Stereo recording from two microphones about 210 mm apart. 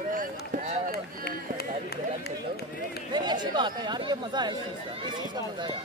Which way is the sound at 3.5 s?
20° right (ahead or behind).